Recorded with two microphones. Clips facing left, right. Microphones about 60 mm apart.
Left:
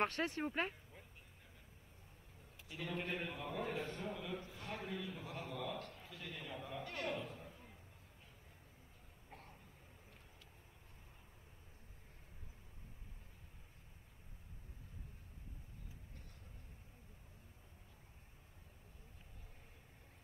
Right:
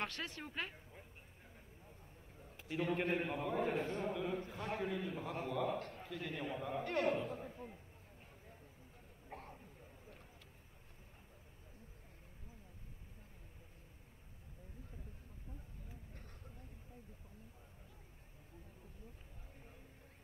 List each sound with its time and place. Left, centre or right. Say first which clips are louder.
0.0 s speech: left 6 dB; left
2.5 s a man's voice: right 7 dB; right
9.3 s vehicle: right 7 dB; right